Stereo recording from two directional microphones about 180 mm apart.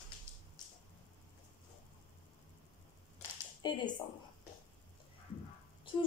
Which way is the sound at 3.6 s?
25° left (ahead or behind).